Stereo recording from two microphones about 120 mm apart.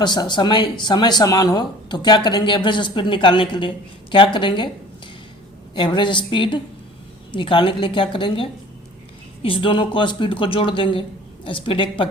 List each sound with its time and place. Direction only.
0.0 s speech: 35° left (ahead or behind)
5.7 s speech: 40° left (ahead or behind)